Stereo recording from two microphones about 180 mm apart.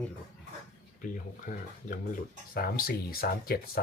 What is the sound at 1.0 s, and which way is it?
Speech, 50° left (ahead or behind).